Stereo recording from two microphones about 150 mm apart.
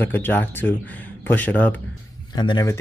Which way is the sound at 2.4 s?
30° left (ahead or behind).